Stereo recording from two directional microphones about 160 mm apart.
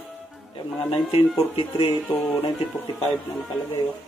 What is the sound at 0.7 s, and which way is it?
Speech, 30° left (ahead or behind).